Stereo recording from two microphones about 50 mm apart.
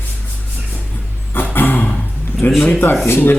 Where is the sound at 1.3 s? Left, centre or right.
Left.